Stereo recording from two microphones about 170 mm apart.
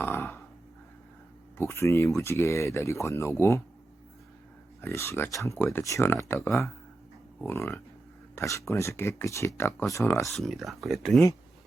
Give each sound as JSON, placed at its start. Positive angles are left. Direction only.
{"t": 0.0, "sound": "a sound", "side_deg": 15}
{"t": 1.5, "sound": "speech", "side_deg": 15}
{"t": 4.8, "sound": "speech", "side_deg": 15}
{"t": 10.2, "sound": "speech", "side_deg": 0}